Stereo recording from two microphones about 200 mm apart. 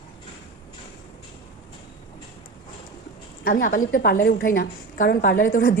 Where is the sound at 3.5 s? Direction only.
45° left (ahead or behind).